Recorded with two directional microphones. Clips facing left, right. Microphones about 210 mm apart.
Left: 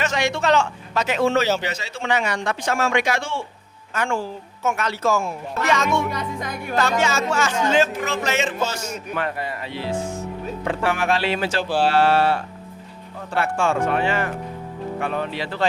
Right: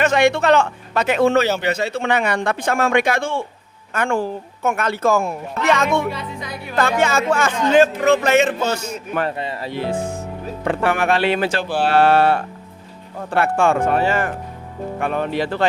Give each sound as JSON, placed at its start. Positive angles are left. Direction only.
{"t": 0.0, "sound": "a man's voice", "side_deg": -60}
{"t": 6.1, "sound": "speech", "side_deg": 50}
{"t": 6.7, "sound": "a man's voice", "side_deg": -55}
{"t": 9.2, "sound": "speech", "side_deg": -30}
{"t": 9.6, "sound": "a man's voice", "side_deg": -50}
{"t": 13.9, "sound": "speech", "side_deg": -40}
{"t": 15.0, "sound": "speech", "side_deg": -55}